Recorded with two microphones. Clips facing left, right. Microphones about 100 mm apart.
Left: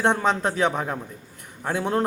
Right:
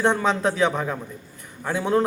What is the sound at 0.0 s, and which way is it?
Speech, 15° left (ahead or behind).